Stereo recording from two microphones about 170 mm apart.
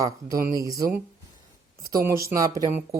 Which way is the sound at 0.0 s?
20° right (ahead or behind).